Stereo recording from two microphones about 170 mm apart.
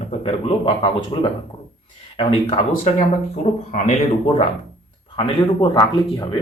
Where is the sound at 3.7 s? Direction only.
45° left (ahead or behind).